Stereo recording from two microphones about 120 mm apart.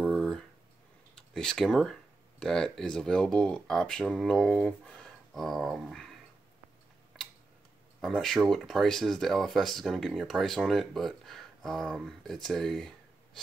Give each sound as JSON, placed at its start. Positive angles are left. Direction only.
{"t": 0.1, "sound": "a sound", "side_deg": 5}
{"t": 1.1, "sound": "speech", "side_deg": 5}
{"t": 8.0, "sound": "speech", "side_deg": 0}